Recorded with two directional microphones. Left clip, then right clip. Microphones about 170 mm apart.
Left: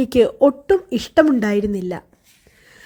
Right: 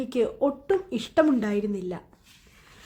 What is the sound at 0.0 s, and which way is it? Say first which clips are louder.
A woman's voice: left 11 dB; 35° left (ahead or behind).